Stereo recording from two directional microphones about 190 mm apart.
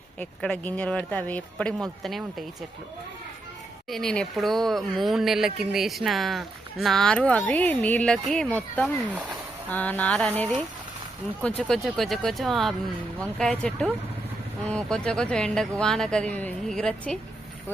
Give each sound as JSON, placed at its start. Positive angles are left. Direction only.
{"t": 0.2, "sound": "speech", "side_deg": 5}
{"t": 3.8, "sound": "speech", "side_deg": 0}
{"t": 9.0, "sound": "speech", "side_deg": -10}
{"t": 9.6, "sound": "speech", "side_deg": 10}